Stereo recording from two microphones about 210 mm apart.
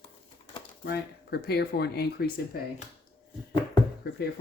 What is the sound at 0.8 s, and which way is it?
Speech, 50° left (ahead or behind).